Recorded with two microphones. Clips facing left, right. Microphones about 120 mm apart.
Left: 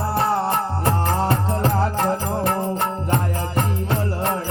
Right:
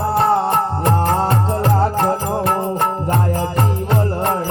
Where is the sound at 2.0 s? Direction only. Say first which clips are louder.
Right 3 dB; 60° right (ahead or behind).